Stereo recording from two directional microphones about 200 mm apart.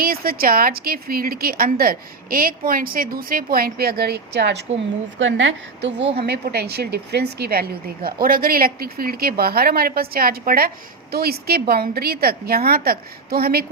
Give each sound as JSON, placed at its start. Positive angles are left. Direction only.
{"t": 0.0, "sound": "a woman's voice", "side_deg": -50}
{"t": 5.2, "sound": "a woman's voice", "side_deg": -70}